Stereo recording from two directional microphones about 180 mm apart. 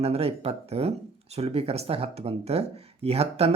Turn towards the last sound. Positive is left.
turn(degrees=-35)  # may be behind; listen again after turning